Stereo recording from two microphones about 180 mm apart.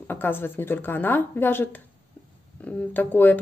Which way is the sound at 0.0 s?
10° left (ahead or behind).